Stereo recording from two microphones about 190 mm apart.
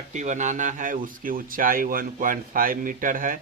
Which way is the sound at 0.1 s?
40° right (ahead or behind).